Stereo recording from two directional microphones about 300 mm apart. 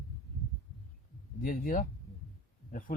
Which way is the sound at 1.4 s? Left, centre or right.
Left.